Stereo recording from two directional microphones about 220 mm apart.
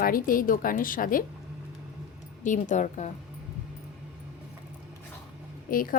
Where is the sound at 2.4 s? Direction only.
35° left (ahead or behind).